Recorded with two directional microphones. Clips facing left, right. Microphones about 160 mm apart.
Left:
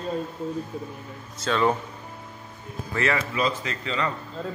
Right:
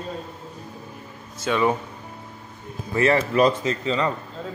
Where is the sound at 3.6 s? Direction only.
25° right (ahead or behind).